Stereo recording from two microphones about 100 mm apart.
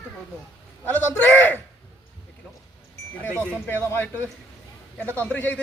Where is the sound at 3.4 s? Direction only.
15° left (ahead or behind).